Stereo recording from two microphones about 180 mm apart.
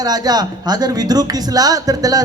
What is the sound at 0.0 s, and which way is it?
A man's voice, 20° right (ahead or behind).